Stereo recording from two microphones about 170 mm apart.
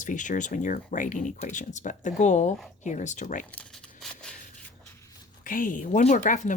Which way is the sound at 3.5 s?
5° left (ahead or behind).